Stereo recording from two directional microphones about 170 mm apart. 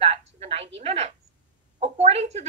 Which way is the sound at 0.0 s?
40° right (ahead or behind).